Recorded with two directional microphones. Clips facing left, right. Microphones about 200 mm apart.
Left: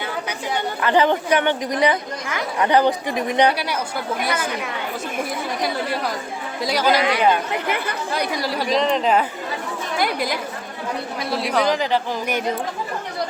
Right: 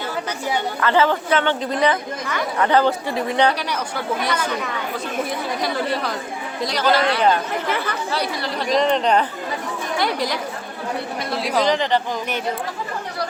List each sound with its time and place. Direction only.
0.8 s a woman's voice: 15° left (ahead or behind)
6.7 s a woman's voice: 10° left (ahead or behind)